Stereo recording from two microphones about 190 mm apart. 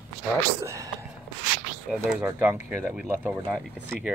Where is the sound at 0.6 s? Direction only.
15° right (ahead or behind).